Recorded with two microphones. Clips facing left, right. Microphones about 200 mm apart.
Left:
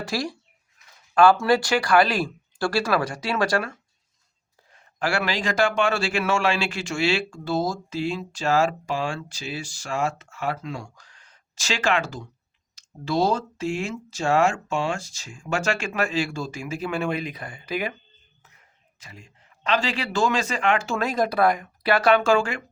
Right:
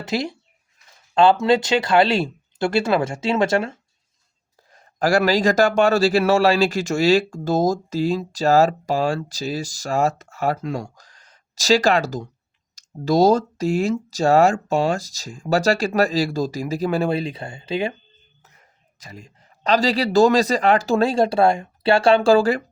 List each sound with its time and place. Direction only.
0.0 s speech: 20° right (ahead or behind)
4.7 s a man's voice: 40° right (ahead or behind)
18.9 s a man's voice: 40° right (ahead or behind)